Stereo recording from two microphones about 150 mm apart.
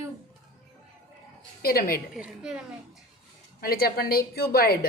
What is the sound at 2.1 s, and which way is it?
Speech, 5° right (ahead or behind).